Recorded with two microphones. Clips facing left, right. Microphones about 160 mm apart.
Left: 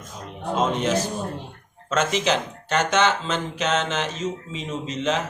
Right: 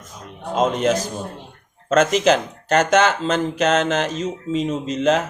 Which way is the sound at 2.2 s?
45° right (ahead or behind).